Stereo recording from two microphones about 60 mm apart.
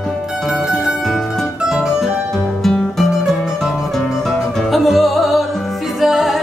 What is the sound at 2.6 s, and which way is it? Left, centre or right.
Music, centre.